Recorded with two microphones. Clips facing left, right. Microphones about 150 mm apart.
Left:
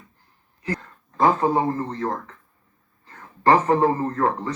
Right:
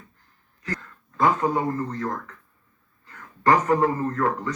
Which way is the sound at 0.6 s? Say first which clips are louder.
Left 4 dB; 30° left (ahead or behind).